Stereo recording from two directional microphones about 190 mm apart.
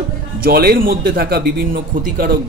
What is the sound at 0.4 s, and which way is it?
A man's voice, 50° right (ahead or behind).